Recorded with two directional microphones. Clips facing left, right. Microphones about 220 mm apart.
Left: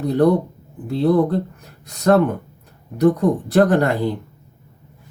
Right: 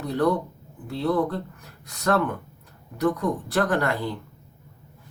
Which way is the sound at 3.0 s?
25° left (ahead or behind).